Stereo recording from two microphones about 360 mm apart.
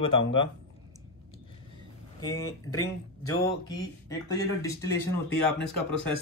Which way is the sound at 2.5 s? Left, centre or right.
Left.